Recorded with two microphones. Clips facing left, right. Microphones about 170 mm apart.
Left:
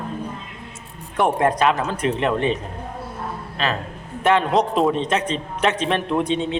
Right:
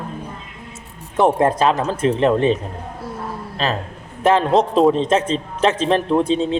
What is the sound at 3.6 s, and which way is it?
A man's voice, 35° right (ahead or behind).